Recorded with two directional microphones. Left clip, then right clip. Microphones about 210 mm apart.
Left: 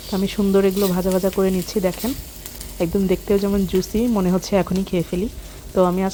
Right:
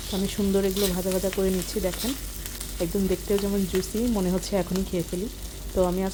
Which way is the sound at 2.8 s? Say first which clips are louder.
Left 6 dB; 20° left (ahead or behind).